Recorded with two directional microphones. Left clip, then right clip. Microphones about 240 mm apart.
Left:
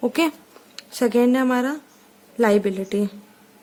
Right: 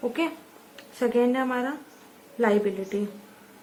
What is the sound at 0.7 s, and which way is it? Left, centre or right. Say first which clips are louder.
Speech: left 4 dB; left.